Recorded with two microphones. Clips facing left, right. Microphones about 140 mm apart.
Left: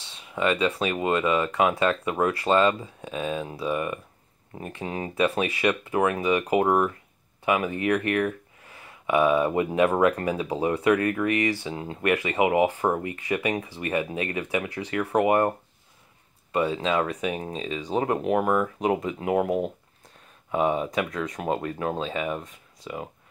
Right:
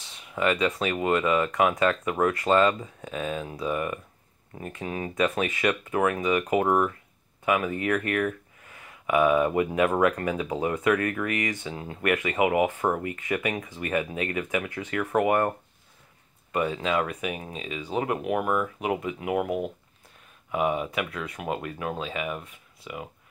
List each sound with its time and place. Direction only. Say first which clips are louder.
0.0 s speech: even; 25° left (ahead or behind)
16.5 s speech: left 2 dB; 30° left (ahead or behind)